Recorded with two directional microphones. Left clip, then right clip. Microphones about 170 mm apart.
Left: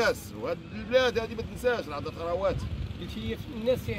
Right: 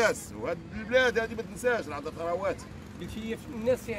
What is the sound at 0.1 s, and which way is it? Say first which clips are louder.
Speech: left 1 dB; 5° right (ahead or behind).